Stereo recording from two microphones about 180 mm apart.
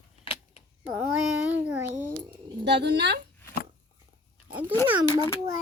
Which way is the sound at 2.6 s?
65° right (ahead or behind).